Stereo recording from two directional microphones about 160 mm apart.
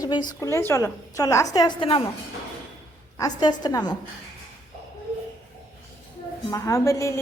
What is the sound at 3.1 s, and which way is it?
Speech, 25° left (ahead or behind).